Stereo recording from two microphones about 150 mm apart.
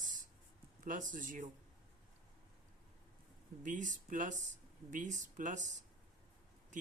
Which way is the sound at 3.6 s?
60° right (ahead or behind).